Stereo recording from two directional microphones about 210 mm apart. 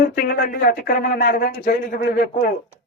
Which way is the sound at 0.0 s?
45° left (ahead or behind).